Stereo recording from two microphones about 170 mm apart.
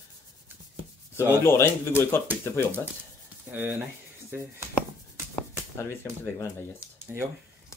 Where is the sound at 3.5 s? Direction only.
15° right (ahead or behind).